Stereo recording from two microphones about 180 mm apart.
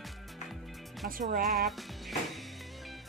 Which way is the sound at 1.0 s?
50° right (ahead or behind).